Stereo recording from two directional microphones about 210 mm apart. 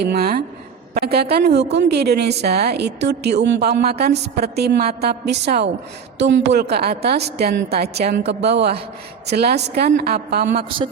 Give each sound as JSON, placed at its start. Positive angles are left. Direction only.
{"t": 0.0, "sound": "a woman's voice", "side_deg": -50}